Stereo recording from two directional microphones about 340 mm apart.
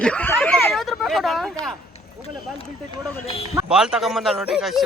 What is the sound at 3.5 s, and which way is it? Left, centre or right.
A man's voice, centre.